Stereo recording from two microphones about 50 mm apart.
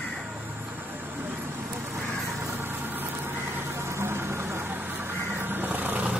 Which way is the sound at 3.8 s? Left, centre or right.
Right.